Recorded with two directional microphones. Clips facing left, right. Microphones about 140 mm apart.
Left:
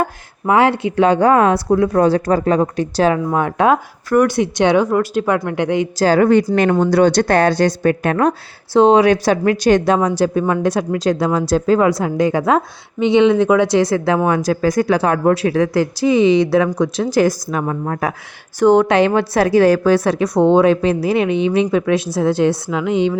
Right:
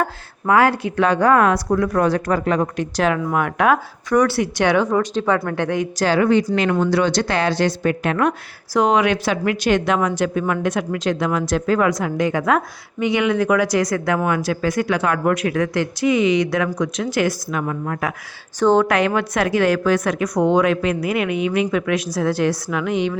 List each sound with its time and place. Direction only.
0.0 s a woman's voice: 25° left (ahead or behind)
4.9 s speech: 10° left (ahead or behind)
5.5 s a woman's voice: 20° left (ahead or behind)
6.1 s a woman's voice: 45° left (ahead or behind)
18.6 s speech: 15° left (ahead or behind)
18.9 s a woman's voice: 30° left (ahead or behind)